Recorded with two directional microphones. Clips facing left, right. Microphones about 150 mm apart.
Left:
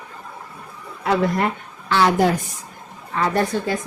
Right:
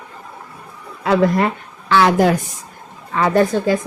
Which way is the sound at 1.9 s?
90° right.